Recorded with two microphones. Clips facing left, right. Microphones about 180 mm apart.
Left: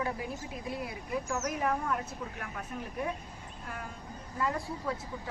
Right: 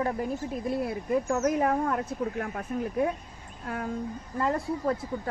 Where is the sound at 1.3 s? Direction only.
50° right (ahead or behind).